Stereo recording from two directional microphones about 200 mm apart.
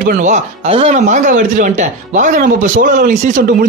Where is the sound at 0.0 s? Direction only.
40° right (ahead or behind).